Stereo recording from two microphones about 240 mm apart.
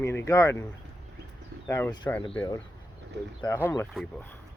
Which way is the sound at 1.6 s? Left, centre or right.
Centre.